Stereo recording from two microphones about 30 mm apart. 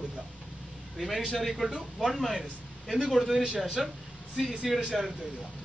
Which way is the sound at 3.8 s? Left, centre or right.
Centre.